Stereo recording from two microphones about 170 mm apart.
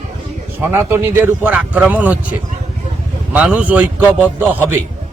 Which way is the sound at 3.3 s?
10° right (ahead or behind).